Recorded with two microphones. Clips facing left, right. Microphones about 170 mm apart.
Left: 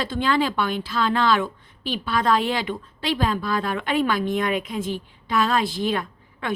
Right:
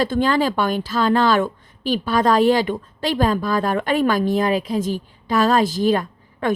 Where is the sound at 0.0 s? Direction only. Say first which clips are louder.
Right 4 dB; 45° right (ahead or behind).